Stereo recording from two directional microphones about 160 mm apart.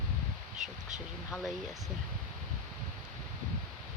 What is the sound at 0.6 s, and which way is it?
Speech, 50° right (ahead or behind).